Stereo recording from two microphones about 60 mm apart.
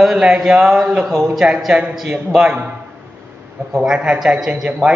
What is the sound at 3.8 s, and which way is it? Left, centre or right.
A man's voice, centre.